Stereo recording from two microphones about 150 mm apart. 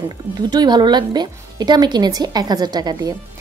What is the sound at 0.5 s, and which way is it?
A woman's voice, 30° right (ahead or behind).